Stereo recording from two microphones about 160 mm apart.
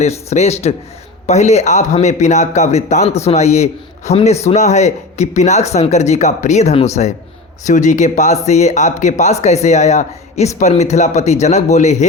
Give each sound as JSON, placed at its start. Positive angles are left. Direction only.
{"t": 0.0, "sound": "a man's voice", "side_deg": 40}